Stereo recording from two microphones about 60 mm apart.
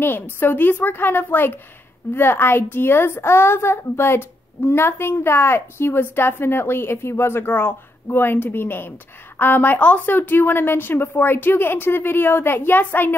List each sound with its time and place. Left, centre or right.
0.0 s a woman's voice: left